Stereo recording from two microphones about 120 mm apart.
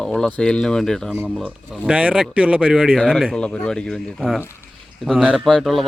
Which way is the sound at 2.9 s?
5° left (ahead or behind).